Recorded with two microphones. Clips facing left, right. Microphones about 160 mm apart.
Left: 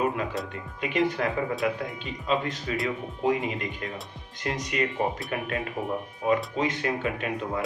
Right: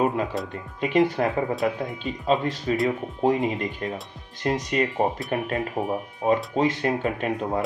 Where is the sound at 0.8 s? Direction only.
30° right (ahead or behind).